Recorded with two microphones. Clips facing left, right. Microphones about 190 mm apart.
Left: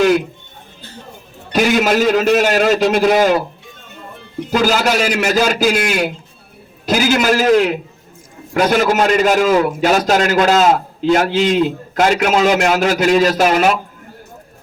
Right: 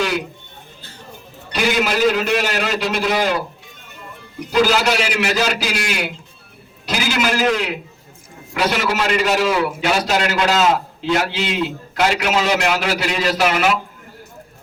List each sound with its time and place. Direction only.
1.5 s a man's voice: 50° left (ahead or behind)
4.6 s a man's voice: 45° left (ahead or behind)